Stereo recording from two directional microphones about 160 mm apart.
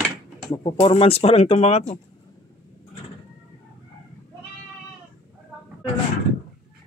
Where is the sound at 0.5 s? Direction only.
35° left (ahead or behind).